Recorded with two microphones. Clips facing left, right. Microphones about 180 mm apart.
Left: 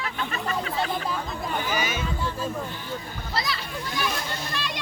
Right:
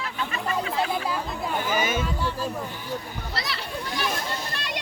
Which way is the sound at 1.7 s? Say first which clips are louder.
Right 3 dB; 50° right (ahead or behind).